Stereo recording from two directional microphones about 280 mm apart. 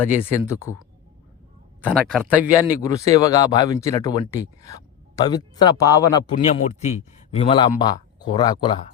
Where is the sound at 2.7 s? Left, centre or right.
Centre.